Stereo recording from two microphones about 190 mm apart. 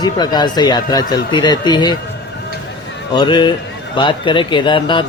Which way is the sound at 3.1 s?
25° left (ahead or behind).